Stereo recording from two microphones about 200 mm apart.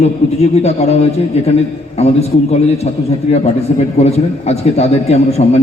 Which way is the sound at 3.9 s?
30° left (ahead or behind).